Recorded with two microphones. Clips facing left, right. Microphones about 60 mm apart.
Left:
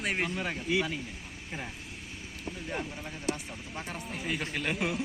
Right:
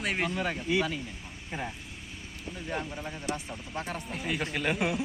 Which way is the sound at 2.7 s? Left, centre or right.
Centre.